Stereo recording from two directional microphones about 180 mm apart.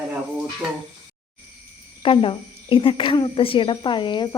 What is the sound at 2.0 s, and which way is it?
A woman's voice, 30° left (ahead or behind).